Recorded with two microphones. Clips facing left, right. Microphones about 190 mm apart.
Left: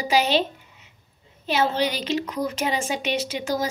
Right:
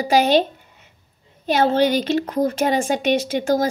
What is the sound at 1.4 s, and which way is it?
A woman's voice, 50° right (ahead or behind).